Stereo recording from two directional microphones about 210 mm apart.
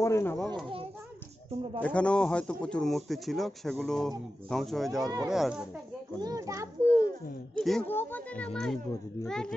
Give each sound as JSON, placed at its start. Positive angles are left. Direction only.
{"t": 0.0, "sound": "speech", "side_deg": 15}
{"t": 1.8, "sound": "a man's voice", "side_deg": 5}
{"t": 5.0, "sound": "speech", "side_deg": -20}
{"t": 5.3, "sound": "a man's voice", "side_deg": -5}
{"t": 6.2, "sound": "a child's voice", "side_deg": -15}
{"t": 6.9, "sound": "a child's voice", "side_deg": -40}
{"t": 7.5, "sound": "a man's voice", "side_deg": 5}